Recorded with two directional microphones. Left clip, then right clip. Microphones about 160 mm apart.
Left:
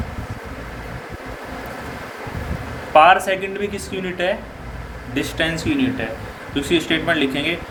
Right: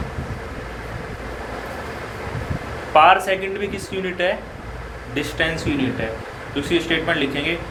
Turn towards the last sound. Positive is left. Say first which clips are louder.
# left 2 dB
turn(degrees=55)  # may be behind; listen again after turning